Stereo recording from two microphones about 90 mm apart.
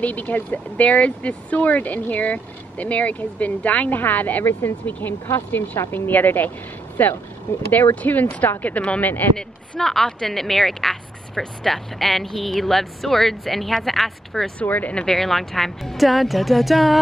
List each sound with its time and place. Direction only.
0.0 s a woman's voice: 20° left (ahead or behind)
9.4 s speech: 5° left (ahead or behind)
14.6 s speech: 15° left (ahead or behind); by 17.0 s centre (ahead or behind)